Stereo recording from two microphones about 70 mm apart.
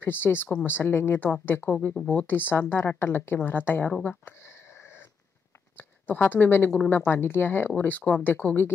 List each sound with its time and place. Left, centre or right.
0.0 s speech: left
2.0 s speech: centre
2.2 s speech: left
5.8 s a woman's voice: left